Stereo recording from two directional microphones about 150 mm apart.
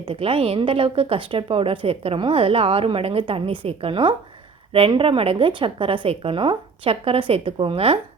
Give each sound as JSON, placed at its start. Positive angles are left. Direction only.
{"t": 0.1, "sound": "a woman's voice", "side_deg": -40}